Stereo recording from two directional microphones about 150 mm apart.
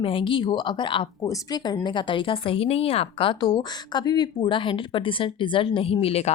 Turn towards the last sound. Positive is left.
turn(degrees=45)  # may be behind; listen again after turning